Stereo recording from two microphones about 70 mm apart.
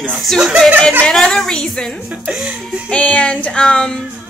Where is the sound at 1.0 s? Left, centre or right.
Centre.